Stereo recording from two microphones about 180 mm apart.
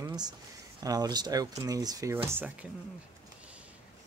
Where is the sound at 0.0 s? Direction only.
20° right (ahead or behind).